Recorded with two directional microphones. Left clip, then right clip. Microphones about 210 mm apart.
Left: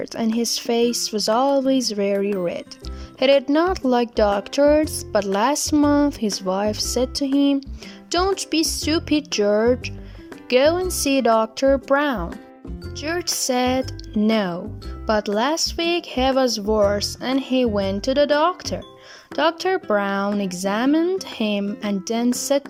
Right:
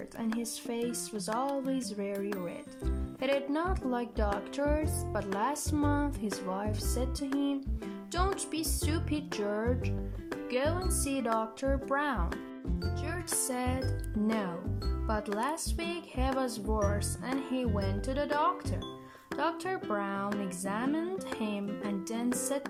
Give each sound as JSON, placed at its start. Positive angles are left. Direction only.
{"t": 0.0, "sound": "speech", "side_deg": 35}